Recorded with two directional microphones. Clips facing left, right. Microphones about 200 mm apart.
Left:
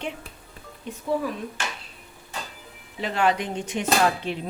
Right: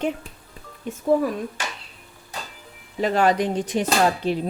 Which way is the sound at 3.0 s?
40° right (ahead or behind).